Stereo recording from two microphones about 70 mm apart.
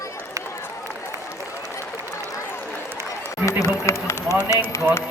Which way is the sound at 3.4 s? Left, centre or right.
Left.